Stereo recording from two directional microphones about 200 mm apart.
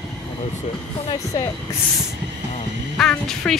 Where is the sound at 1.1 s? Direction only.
20° left (ahead or behind).